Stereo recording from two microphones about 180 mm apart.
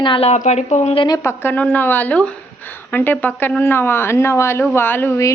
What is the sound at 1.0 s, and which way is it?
A woman's voice, 20° left (ahead or behind).